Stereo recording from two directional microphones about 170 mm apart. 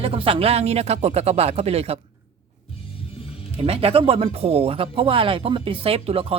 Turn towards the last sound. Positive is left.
turn(degrees=-35)  # may be behind; listen again after turning